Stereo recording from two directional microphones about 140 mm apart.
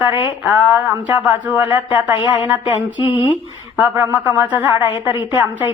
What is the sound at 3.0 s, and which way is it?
Speech, 35° left (ahead or behind).